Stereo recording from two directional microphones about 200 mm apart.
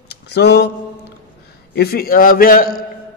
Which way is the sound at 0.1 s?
55° left (ahead or behind).